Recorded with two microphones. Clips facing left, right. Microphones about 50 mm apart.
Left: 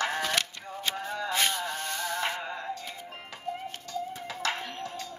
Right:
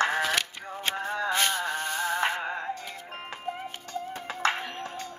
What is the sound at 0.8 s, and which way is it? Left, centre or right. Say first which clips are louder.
Music: right 3 dB; right.